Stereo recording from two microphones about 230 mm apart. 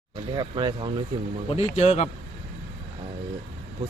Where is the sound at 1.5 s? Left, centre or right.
Left.